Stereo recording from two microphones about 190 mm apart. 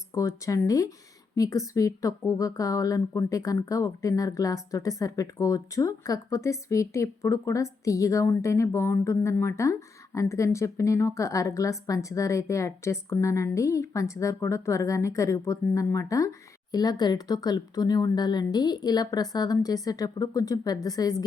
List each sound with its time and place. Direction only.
0.1 s speech: 15° left (ahead or behind)